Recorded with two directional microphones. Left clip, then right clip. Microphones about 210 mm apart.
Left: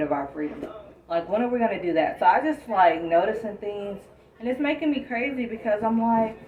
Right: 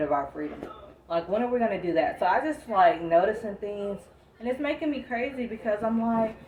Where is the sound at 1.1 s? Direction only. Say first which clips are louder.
Left 2 dB; 15° right (ahead or behind).